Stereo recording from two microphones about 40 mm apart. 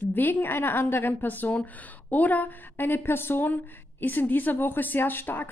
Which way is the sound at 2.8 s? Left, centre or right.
Left.